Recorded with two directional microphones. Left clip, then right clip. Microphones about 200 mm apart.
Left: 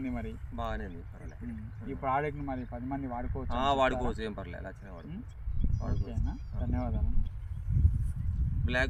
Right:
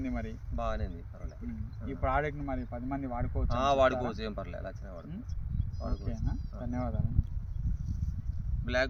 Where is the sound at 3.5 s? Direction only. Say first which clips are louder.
Right 2 dB; 15° right (ahead or behind).